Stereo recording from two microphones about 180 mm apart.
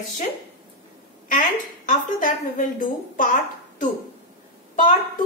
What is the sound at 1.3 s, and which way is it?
Speech, 45° left (ahead or behind).